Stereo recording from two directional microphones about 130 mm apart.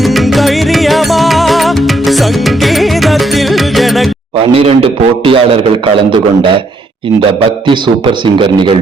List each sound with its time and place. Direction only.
0.0 s music: centre (ahead or behind)
4.5 s a man's voice: 45° right (ahead or behind)